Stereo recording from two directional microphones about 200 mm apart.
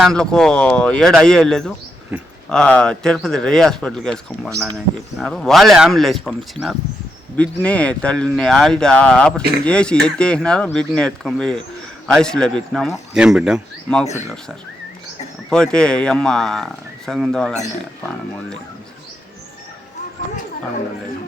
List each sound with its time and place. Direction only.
0.0 s speech: 5° left (ahead or behind)
9.4 s speech: 50° right (ahead or behind)
9.6 s speech: 5° left (ahead or behind)
15.4 s speech: 5° left (ahead or behind)